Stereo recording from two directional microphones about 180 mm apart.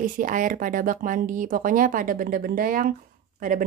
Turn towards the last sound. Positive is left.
turn(degrees=-45)  # may be behind; listen again after turning